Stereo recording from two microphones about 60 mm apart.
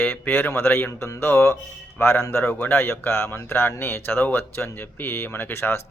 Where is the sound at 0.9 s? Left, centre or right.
Left.